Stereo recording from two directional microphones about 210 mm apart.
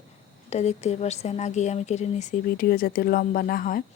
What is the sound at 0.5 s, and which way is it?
Speech, 30° left (ahead or behind).